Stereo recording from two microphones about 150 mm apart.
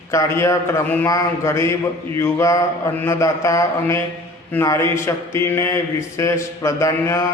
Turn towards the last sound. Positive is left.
turn(degrees=20)  # may be behind; listen again after turning